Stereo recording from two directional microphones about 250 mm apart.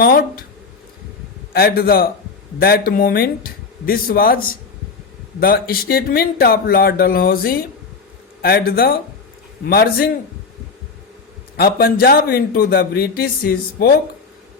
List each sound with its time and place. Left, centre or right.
0.0 s a man's voice: left
1.5 s a man's voice: left
11.5 s a man's voice: left